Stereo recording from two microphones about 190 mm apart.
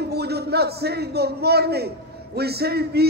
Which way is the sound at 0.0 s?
60° right (ahead or behind).